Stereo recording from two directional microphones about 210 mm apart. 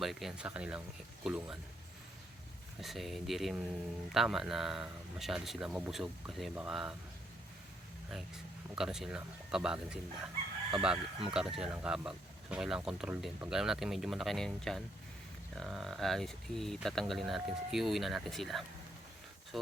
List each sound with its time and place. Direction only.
0.0 s speech: centre (ahead or behind)
2.8 s speech: centre (ahead or behind)
8.7 s speech: 5° right (ahead or behind)